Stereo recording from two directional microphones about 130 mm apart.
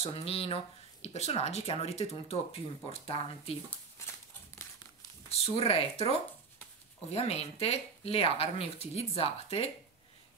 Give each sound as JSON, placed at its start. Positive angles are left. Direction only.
{"t": 0.0, "sound": "speech", "side_deg": 50}
{"t": 5.3, "sound": "speech", "side_deg": 50}